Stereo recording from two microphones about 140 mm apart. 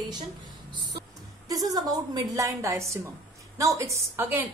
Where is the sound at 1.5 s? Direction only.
25° right (ahead or behind).